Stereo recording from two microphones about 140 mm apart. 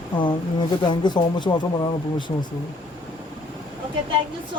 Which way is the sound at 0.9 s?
30° left (ahead or behind).